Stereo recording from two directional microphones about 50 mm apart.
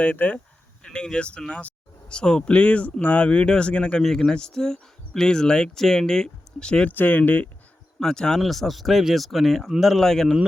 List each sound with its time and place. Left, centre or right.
0.0 s speech: left
0.9 s speech: centre
4.0 s speech: centre
6.9 s speech: left
7.9 s speech: centre